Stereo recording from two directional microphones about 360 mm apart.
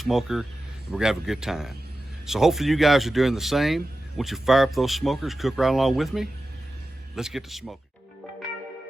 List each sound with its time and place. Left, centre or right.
0.0 s speech: centre